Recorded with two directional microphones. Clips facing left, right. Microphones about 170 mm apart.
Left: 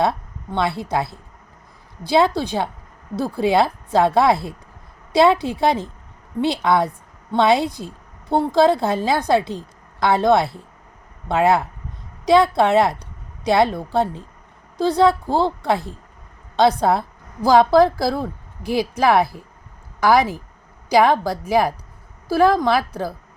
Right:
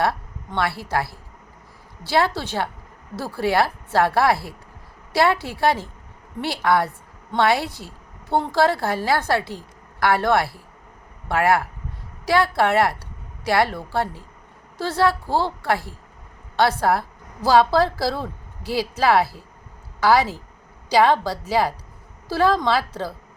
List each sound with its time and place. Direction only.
0.0 s a woman's voice: 20° left (ahead or behind)